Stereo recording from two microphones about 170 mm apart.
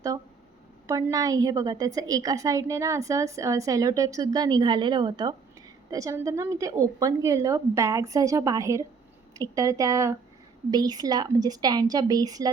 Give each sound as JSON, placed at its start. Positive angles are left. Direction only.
{"t": 0.9, "sound": "a woman's voice", "side_deg": -20}